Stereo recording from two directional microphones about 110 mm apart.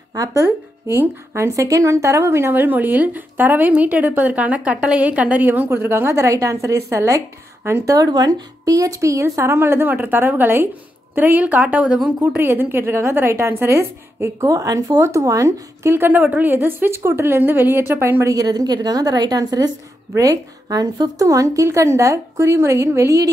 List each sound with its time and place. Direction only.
0.1 s a woman's voice: 30° right (ahead or behind)
18.3 s a woman's voice: 35° right (ahead or behind)